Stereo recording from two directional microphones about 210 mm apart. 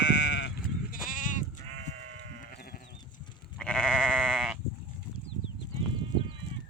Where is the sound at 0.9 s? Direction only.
40° left (ahead or behind).